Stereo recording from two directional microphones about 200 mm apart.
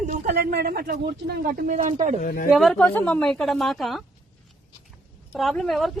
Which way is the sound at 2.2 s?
45° left (ahead or behind).